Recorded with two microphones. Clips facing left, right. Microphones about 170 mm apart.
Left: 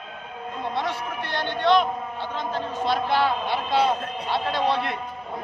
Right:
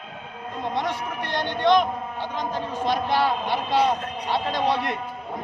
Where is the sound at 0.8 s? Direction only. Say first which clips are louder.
Right 1 dB; 15° right (ahead or behind).